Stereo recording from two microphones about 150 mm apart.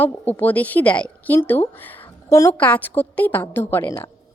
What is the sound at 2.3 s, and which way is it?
Speech, 20° left (ahead or behind).